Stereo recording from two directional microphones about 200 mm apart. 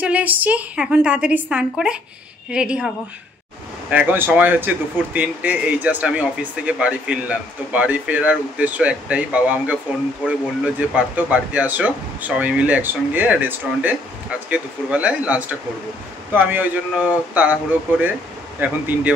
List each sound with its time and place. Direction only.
0.0 s speech: 5° right (ahead or behind)
3.9 s speech: 5° right (ahead or behind)